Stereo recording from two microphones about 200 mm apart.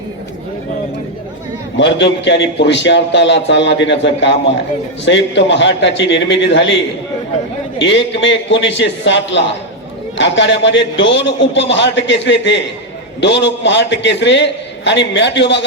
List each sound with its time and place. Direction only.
1.8 s a man's voice: 60° left (ahead or behind)
7.8 s a man's voice: 65° left (ahead or behind)